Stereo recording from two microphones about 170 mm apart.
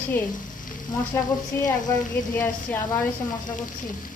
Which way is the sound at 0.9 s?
20° left (ahead or behind).